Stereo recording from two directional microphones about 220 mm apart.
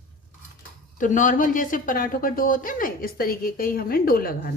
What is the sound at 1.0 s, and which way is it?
A woman's voice, 35° left (ahead or behind).